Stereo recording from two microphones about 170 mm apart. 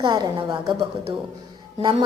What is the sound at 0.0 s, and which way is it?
Speech, 25° right (ahead or behind).